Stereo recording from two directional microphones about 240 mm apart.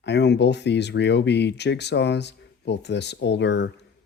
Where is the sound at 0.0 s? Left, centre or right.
Left.